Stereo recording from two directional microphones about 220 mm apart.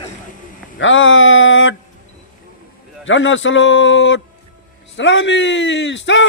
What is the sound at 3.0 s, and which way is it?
A man's voice, 60° left (ahead or behind).